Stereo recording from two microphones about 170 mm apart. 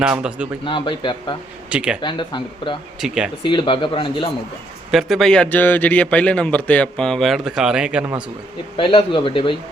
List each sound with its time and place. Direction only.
0.0 s speech: 5° right (ahead or behind)
0.6 s a man's voice: 30° left (ahead or behind)
1.7 s speech: 5° right (ahead or behind)
2.0 s a man's voice: 25° left (ahead or behind)
3.0 s a man's voice: 5° right (ahead or behind)
3.4 s a man's voice: 30° left (ahead or behind)
4.9 s a man's voice: centre (ahead or behind)
8.7 s a man's voice: 30° left (ahead or behind)